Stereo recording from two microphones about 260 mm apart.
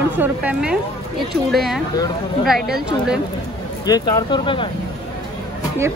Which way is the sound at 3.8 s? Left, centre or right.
Centre.